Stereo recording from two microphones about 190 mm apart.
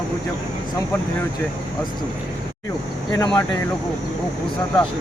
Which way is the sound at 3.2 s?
20° left (ahead or behind).